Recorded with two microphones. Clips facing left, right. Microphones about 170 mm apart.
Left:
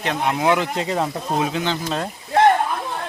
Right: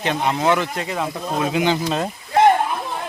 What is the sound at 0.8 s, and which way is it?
Speech, 35° left (ahead or behind).